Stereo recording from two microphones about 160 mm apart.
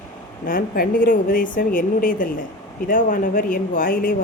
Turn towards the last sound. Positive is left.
turn(degrees=60)  # may be behind; listen again after turning